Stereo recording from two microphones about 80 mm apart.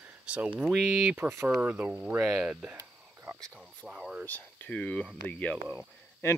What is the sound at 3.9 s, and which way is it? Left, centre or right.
Speech, centre.